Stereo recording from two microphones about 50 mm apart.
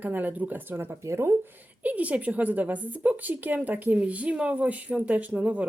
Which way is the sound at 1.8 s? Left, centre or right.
Right.